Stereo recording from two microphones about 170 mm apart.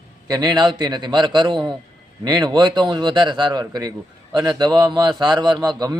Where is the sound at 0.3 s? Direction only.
25° right (ahead or behind).